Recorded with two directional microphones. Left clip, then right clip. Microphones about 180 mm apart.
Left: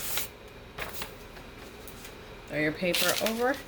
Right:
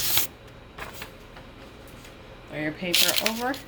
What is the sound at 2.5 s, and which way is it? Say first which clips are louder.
Speech: left 2 dB; 30° left (ahead or behind).